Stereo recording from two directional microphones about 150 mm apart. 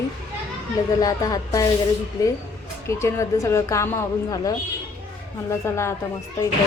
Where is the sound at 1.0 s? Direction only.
25° left (ahead or behind).